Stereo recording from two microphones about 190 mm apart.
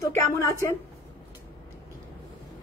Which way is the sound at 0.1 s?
15° left (ahead or behind).